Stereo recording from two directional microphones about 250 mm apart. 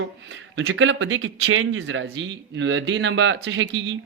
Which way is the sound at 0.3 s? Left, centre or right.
Right.